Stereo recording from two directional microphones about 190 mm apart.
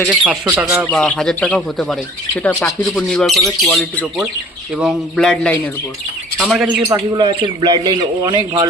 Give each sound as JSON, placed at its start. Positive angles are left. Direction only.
{"t": 0.0, "sound": "speech", "side_deg": 0}
{"t": 0.9, "sound": "speech", "side_deg": 5}
{"t": 6.8, "sound": "speech", "side_deg": -20}